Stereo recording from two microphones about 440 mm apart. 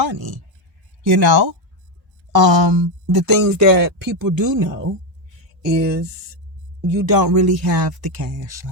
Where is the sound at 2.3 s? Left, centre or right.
Right.